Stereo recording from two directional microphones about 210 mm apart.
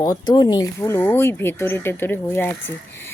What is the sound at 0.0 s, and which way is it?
A woman's voice, 20° left (ahead or behind).